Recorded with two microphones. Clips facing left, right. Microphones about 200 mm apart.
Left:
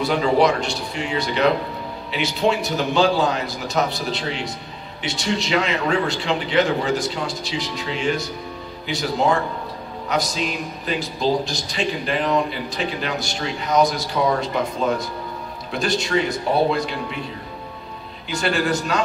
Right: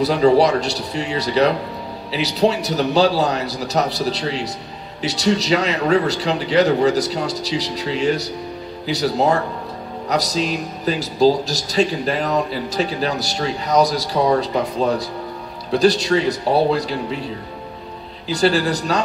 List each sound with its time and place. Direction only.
0.0 s a man's voice: 35° right (ahead or behind)
18.3 s a man's voice: 35° right (ahead or behind)